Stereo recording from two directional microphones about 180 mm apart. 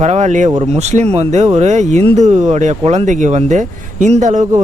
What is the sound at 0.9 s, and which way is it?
Speech, 35° right (ahead or behind).